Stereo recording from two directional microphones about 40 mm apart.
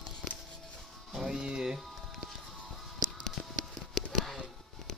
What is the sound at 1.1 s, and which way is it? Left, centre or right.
Music, centre.